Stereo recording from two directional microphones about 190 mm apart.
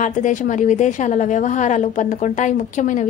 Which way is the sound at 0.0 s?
40° left (ahead or behind).